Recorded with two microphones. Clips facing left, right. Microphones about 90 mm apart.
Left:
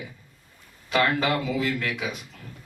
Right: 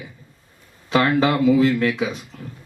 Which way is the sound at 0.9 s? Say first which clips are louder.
Right 5 dB; 35° right (ahead or behind).